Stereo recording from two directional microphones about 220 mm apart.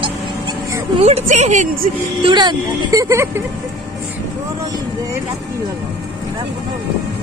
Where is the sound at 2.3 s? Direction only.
20° right (ahead or behind).